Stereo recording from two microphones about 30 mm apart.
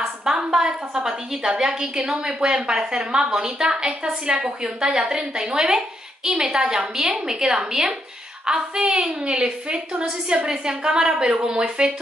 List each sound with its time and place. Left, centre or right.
0.2 s a woman's voice: centre